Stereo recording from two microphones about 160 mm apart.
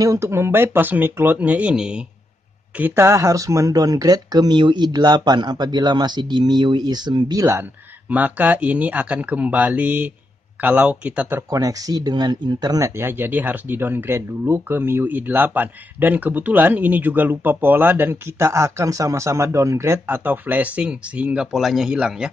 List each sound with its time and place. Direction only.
0.0 s speech: 20° right (ahead or behind)